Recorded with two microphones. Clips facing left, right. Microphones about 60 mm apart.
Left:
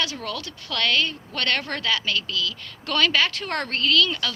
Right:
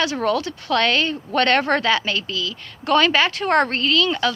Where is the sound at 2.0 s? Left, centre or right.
Right.